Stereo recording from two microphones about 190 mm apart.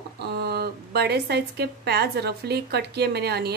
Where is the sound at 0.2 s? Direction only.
60° right (ahead or behind).